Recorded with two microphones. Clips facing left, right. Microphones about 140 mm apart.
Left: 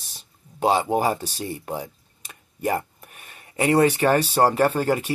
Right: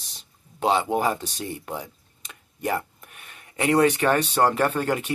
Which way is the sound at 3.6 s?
40° left (ahead or behind).